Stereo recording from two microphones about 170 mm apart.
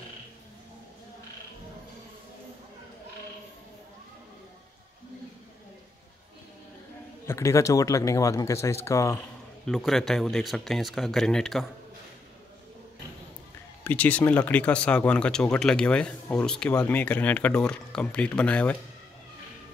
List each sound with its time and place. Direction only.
7.2 s speech: 15° left (ahead or behind)
9.7 s speech: centre (ahead or behind)
13.8 s speech: 10° left (ahead or behind)